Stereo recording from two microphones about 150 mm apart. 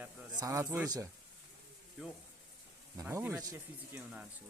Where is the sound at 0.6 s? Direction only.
10° right (ahead or behind).